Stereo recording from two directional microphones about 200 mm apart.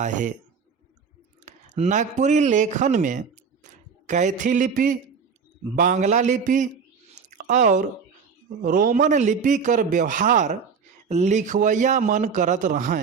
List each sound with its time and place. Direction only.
0.0 s a man's voice: 40° right (ahead or behind)
1.5 s a man's voice: 35° right (ahead or behind)
7.2 s chewing: 40° right (ahead or behind)
8.6 s a man's voice: 45° right (ahead or behind)